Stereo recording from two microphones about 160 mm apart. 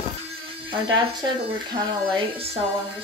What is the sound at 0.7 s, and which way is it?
Speech, 30° right (ahead or behind).